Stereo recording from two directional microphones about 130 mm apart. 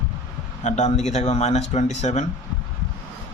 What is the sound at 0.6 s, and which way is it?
Speech, 60° left (ahead or behind).